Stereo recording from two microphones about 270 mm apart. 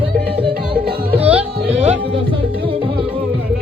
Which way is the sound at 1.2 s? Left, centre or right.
Centre.